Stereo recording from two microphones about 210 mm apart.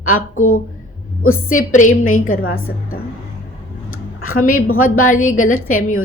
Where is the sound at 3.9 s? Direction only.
90° left.